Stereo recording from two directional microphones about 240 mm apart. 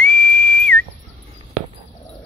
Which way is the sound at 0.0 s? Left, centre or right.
Centre.